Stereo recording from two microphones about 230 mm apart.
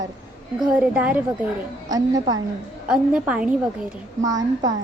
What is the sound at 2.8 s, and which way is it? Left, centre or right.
Speech, centre.